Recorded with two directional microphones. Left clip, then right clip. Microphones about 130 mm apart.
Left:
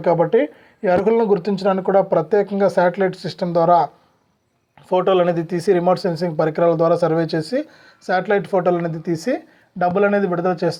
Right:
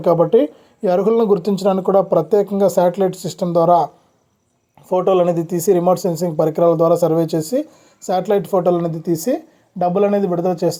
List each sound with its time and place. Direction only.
0.0 s speech: 50° right (ahead or behind); by 10.8 s 35° right (ahead or behind)